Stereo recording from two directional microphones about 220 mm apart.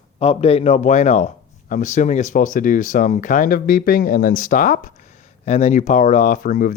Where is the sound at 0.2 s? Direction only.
25° left (ahead or behind).